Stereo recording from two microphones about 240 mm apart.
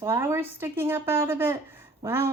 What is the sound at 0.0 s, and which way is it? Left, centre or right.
Speech, centre.